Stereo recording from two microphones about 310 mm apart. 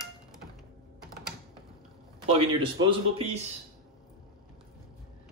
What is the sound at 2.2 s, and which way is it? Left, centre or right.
A man's voice, centre.